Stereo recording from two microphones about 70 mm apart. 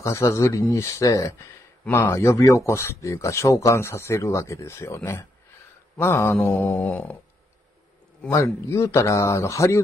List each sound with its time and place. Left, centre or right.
0.0 s speech: left
1.9 s speech: left
5.9 s mantra: left
6.3 s mantra: left
8.3 s speech: left